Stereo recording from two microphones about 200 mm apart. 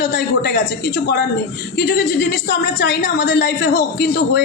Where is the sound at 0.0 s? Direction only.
60° left (ahead or behind).